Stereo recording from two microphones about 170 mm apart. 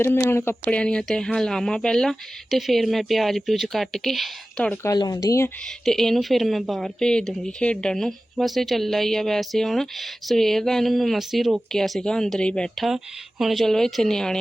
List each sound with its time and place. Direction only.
0.0 s a woman's voice: 15° left (ahead or behind)
4.9 s speech: 20° left (ahead or behind)
5.6 s a woman's voice: centre (ahead or behind)